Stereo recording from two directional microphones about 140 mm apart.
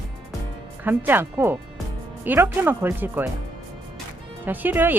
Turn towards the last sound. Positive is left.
turn(degrees=-15)  # may be behind; listen again after turning